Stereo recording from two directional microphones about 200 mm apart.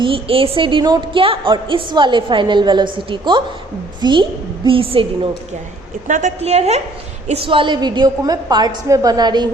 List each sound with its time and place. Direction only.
0.0 s a woman's voice: 25° right (ahead or behind)
6.1 s a woman's voice: 40° right (ahead or behind); by 9.5 s 20° right (ahead or behind)